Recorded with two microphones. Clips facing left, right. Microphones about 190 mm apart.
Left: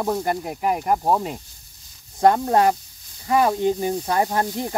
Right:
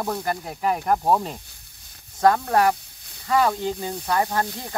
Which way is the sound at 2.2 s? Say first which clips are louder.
Left 2 dB; 25° left (ahead or behind).